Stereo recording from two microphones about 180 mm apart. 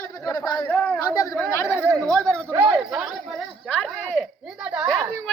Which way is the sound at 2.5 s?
15° right (ahead or behind).